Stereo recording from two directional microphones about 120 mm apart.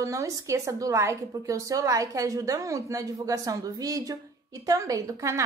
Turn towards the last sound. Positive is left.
turn(degrees=-25)  # may be behind; listen again after turning